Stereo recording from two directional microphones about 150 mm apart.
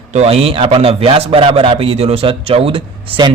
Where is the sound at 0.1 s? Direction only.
45° right (ahead or behind).